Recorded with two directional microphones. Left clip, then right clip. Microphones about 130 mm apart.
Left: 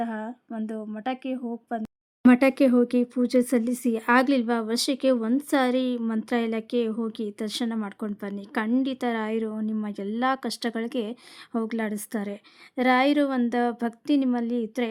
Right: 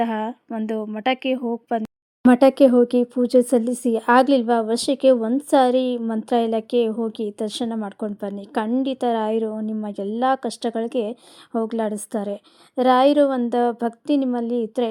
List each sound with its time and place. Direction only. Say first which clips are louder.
0.0 s a woman's voice: right 8 dB; 25° right (ahead or behind)
2.2 s speech: right 6 dB; 15° right (ahead or behind)